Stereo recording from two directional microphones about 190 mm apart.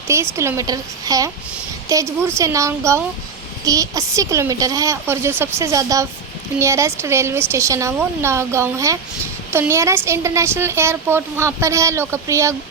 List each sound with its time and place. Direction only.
0.3 s a woman's voice: 15° right (ahead or behind)